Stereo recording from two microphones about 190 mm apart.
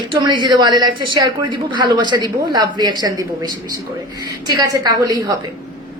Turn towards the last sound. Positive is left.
turn(degrees=-20)  # may be behind; listen again after turning